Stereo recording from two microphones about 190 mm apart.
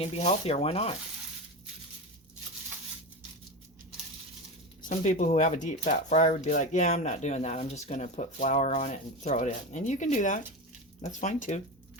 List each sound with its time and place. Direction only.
0.0 s speech: 35° left (ahead or behind)
4.9 s speech: 40° left (ahead or behind)